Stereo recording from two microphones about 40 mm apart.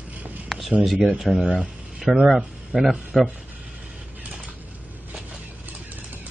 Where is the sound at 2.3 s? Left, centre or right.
Centre.